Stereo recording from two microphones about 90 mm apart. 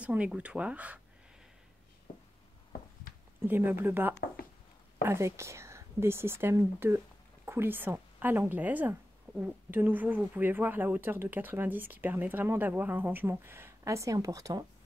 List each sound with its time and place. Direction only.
0.0 s speech: 15° right (ahead or behind)
3.4 s speech: 25° right (ahead or behind); by 14.6 s 40° right (ahead or behind)